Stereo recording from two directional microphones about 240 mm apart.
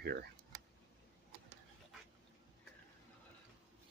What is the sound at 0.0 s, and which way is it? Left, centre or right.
Speech, right.